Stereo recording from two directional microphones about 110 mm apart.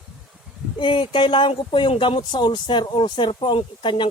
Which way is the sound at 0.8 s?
50° left (ahead or behind).